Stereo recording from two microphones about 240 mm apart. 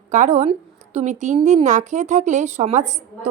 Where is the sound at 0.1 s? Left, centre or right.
Right.